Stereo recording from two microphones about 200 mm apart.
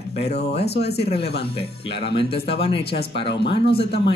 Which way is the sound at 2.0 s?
30° left (ahead or behind).